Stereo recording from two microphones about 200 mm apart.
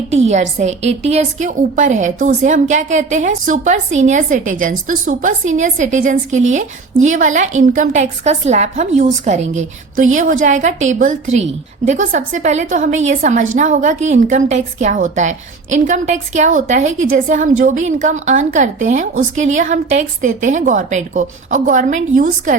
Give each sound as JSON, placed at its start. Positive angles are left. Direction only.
{"t": 0.1, "sound": "a woman's voice", "side_deg": -35}